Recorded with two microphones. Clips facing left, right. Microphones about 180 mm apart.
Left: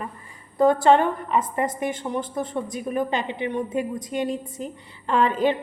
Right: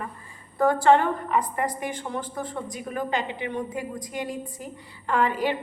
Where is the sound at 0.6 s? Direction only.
20° left (ahead or behind).